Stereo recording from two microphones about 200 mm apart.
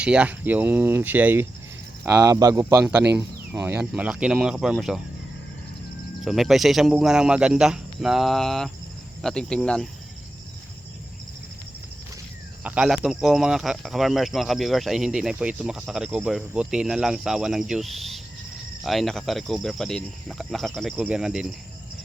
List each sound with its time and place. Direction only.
0.0 s speech: 5° right (ahead or behind)
6.2 s speech: centre (ahead or behind)
12.6 s speech: 5° right (ahead or behind)